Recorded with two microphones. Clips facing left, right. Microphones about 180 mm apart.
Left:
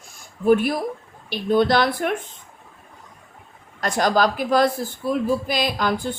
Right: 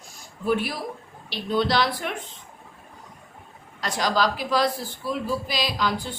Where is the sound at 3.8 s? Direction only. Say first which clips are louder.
Left 5 dB; 50° left (ahead or behind).